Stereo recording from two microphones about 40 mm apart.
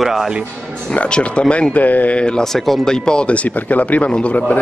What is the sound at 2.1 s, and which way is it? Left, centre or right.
Speech, left.